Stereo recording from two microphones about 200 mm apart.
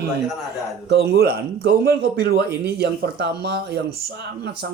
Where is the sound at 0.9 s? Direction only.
55° right (ahead or behind).